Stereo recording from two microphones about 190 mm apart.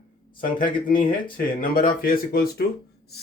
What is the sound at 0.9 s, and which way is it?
Speech, 45° left (ahead or behind).